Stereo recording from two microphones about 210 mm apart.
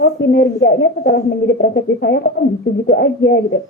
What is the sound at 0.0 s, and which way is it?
Speech, 55° left (ahead or behind).